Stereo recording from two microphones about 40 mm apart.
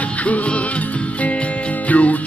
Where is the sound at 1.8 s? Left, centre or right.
Left.